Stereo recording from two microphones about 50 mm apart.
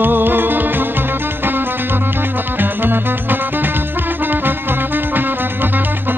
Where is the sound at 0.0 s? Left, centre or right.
Right.